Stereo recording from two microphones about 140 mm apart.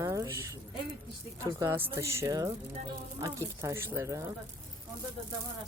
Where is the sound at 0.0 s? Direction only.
20° right (ahead or behind).